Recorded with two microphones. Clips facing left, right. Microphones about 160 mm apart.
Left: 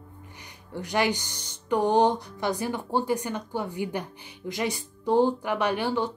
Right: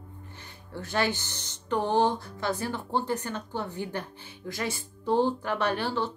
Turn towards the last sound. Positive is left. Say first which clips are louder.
# left 2 dB
turn(degrees=15)  # may be behind; listen again after turning